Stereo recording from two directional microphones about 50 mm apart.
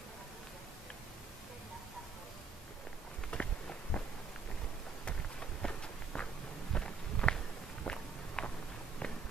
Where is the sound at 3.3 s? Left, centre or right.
Left.